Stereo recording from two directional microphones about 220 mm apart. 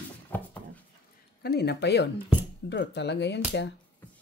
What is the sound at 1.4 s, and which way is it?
Speech, 45° left (ahead or behind).